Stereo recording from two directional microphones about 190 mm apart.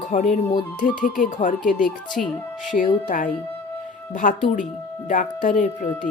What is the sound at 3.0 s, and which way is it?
Speech, 45° left (ahead or behind).